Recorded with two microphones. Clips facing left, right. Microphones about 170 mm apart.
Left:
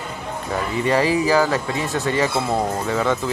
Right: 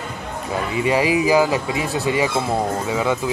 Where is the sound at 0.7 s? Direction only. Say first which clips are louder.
Even; 10° right (ahead or behind).